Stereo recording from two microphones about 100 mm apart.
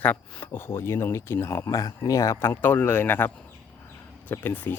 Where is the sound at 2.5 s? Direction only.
20° left (ahead or behind).